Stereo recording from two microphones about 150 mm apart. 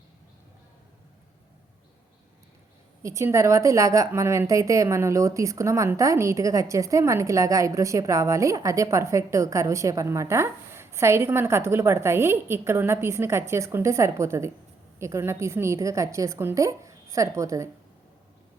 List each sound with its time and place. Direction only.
3.0 s a woman's voice: 20° right (ahead or behind)